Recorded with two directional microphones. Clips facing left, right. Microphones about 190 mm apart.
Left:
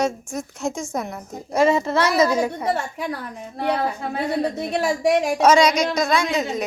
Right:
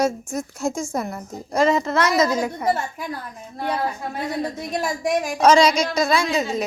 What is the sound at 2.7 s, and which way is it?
A woman's voice, 70° left (ahead or behind).